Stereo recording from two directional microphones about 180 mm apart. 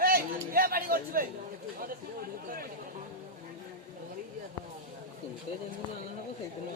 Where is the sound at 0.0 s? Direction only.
55° right (ahead or behind).